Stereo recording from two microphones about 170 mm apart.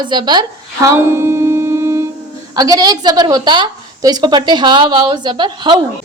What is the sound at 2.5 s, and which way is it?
A woman's voice, 20° right (ahead or behind).